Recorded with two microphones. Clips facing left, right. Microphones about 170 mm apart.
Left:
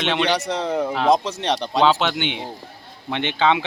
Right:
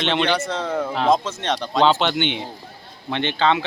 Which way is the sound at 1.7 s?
5° left (ahead or behind).